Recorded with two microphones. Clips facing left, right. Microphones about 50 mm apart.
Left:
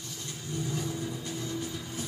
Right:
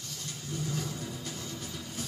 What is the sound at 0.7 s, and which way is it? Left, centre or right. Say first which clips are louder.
Vehicle: left 3 dB; centre.